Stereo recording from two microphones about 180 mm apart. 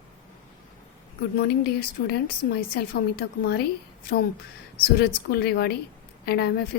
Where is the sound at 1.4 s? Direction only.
60° left (ahead or behind).